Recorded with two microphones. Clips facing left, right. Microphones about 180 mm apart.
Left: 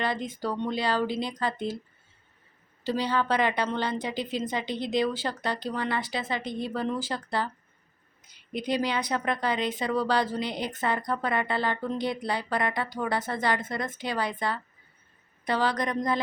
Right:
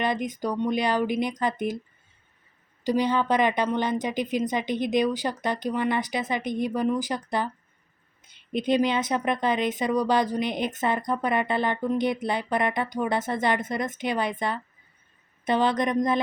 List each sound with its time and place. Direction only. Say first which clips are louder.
0.0 s a woman's voice: right 3 dB; 20° right (ahead or behind)
2.8 s a woman's voice: right 4 dB; 15° right (ahead or behind)